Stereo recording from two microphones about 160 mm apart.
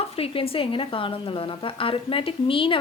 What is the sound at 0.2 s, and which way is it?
A woman's voice, 35° left (ahead or behind).